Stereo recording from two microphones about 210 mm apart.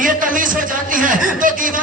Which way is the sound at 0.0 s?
40° right (ahead or behind).